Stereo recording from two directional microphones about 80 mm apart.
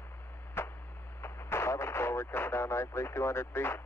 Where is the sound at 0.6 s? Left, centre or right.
Left.